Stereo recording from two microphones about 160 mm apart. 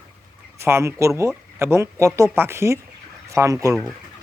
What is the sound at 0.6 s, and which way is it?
A man's voice, 15° right (ahead or behind).